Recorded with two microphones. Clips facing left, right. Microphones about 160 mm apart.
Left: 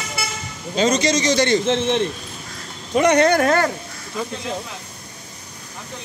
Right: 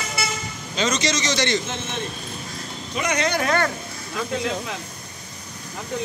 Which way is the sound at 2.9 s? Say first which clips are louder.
Left 9 dB; 50° left (ahead or behind).